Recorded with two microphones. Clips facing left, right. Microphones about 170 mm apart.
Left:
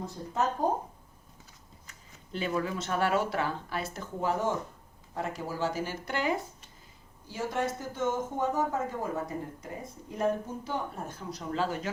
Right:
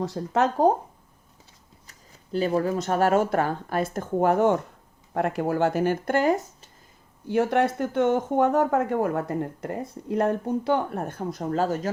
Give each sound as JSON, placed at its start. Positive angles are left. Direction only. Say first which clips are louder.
{"t": 0.0, "sound": "speech", "louder": "right 7 dB", "side_deg": -80}
{"t": 1.9, "sound": "speech", "louder": "right 9 dB", "side_deg": -40}
{"t": 7.3, "sound": "speech", "louder": "right 10 dB", "side_deg": -65}